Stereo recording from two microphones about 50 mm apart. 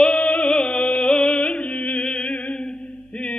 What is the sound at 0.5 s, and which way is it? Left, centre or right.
Music, centre.